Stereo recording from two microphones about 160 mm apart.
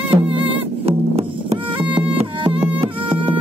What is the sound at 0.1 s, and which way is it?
Music, 35° right (ahead or behind).